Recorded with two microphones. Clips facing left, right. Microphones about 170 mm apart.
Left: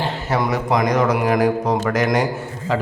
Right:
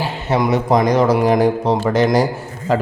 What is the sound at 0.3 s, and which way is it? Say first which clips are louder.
A man's voice: right 5 dB; 25° right (ahead or behind).